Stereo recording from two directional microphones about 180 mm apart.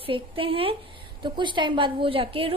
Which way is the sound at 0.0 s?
30° right (ahead or behind).